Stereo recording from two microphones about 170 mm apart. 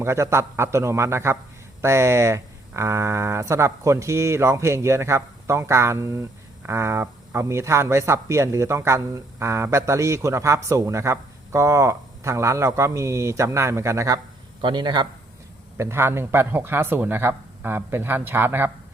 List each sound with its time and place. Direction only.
0.0 s a man's voice: 15° right (ahead or behind)
15.8 s speech: 15° right (ahead or behind)